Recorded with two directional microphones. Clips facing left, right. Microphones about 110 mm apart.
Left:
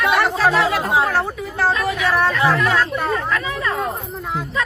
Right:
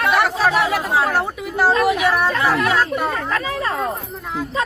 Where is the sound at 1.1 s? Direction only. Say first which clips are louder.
Even; 15° right (ahead or behind).